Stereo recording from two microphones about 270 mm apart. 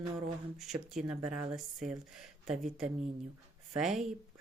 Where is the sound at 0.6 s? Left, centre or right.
Centre.